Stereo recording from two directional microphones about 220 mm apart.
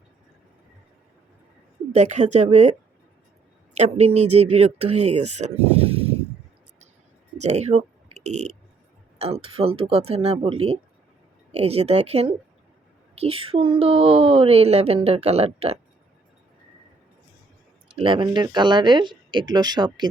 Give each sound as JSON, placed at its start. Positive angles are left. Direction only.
{"t": 1.9, "sound": "speech", "side_deg": -30}
{"t": 3.8, "sound": "a woman's voice", "side_deg": -30}
{"t": 7.3, "sound": "a woman's voice", "side_deg": -30}
{"t": 17.9, "sound": "a woman's voice", "side_deg": -25}